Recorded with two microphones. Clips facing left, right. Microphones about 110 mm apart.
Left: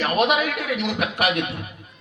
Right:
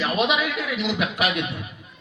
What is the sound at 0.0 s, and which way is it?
A man's voice, 50° left (ahead or behind).